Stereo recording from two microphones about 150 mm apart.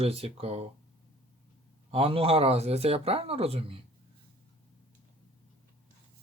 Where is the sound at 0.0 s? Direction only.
45° right (ahead or behind).